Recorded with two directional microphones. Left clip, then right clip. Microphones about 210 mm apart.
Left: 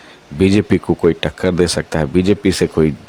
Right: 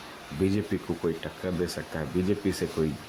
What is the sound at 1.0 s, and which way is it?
Speech, 50° left (ahead or behind).